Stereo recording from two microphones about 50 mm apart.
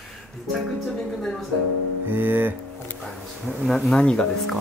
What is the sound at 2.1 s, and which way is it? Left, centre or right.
Music, right.